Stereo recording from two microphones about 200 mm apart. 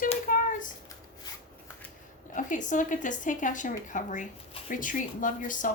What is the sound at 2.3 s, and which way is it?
A woman's voice, 40° left (ahead or behind).